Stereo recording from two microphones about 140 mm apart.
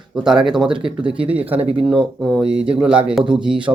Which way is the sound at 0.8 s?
40° right (ahead or behind).